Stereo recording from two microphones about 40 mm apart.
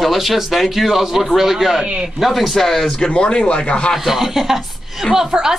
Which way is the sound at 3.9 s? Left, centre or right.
Centre.